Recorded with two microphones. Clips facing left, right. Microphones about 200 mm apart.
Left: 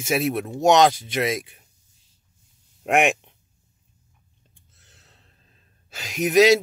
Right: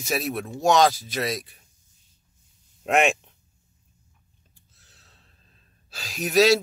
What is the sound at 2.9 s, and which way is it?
Speech, 15° left (ahead or behind).